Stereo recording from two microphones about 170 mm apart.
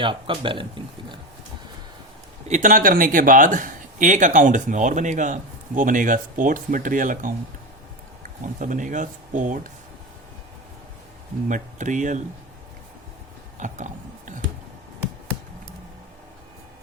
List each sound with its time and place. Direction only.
0.0 s speech: 30° right (ahead or behind)
2.5 s speech: 50° right (ahead or behind)
11.4 s speech: 50° right (ahead or behind)
13.6 s a sound: 45° right (ahead or behind)